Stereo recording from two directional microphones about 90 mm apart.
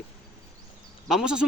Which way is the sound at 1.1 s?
5° right (ahead or behind).